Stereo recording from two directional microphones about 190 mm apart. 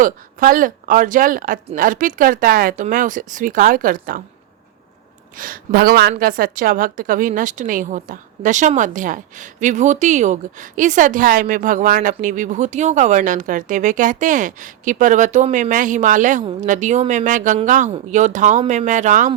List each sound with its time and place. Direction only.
0.0 s a woman's voice: 45° right (ahead or behind)
5.4 s a woman's voice: 50° right (ahead or behind)